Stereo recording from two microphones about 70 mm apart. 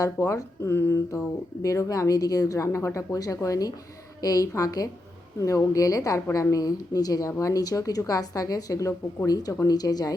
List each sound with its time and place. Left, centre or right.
0.0 s speech: left
1.1 s a woman's voice: left